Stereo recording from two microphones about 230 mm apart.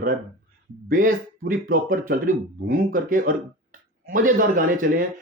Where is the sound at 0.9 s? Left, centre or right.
Right.